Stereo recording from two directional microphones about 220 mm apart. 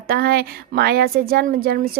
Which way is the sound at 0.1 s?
45° right (ahead or behind).